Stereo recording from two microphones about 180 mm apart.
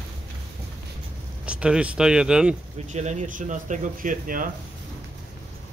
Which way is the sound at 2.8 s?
40° right (ahead or behind).